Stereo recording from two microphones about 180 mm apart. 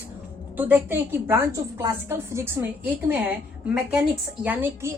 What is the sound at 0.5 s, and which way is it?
A woman's voice, 10° right (ahead or behind).